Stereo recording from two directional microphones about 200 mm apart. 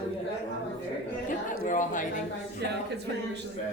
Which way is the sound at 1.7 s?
40° left (ahead or behind).